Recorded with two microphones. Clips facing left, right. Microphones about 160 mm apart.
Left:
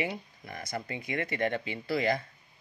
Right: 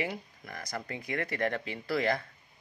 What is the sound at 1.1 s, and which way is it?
Speech, 5° left (ahead or behind).